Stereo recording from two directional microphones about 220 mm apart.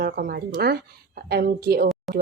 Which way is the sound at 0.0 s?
45° right (ahead or behind).